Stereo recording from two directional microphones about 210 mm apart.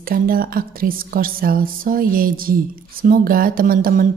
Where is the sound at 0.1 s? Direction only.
45° right (ahead or behind).